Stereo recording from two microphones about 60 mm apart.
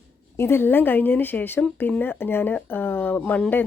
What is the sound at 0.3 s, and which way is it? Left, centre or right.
A woman's voice, left.